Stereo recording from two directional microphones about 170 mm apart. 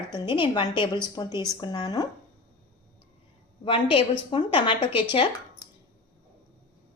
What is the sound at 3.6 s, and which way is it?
A woman's voice, 30° left (ahead or behind).